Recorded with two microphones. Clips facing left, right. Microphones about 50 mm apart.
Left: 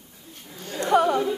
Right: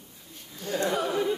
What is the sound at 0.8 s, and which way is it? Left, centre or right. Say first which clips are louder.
Speech: left 7 dB; left.